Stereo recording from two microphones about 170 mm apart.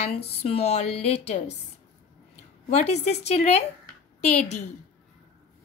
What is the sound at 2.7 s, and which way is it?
A woman's voice, 40° left (ahead or behind).